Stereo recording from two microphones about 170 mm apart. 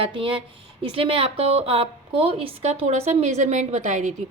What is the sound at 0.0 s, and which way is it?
A woman's voice, 30° right (ahead or behind).